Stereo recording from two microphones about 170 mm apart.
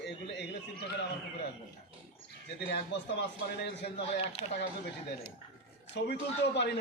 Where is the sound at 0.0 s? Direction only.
80° left.